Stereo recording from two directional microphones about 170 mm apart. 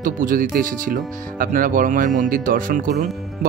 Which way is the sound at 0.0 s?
50° right (ahead or behind).